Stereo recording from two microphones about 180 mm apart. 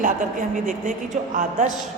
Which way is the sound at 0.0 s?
45° right (ahead or behind).